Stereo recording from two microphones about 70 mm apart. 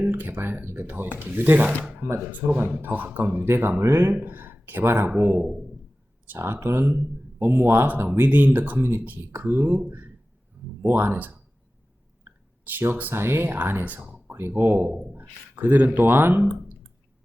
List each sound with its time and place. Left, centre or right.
0.1 s speech: right
3.5 s speech: right
4.1 s speech: right
10.8 s speech: right
14.3 s speech: right